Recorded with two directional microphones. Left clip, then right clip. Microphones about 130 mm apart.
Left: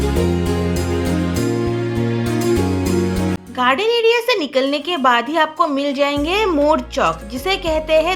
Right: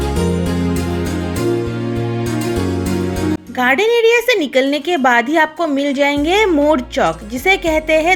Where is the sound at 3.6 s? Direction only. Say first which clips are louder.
Right 3 dB; 25° right (ahead or behind).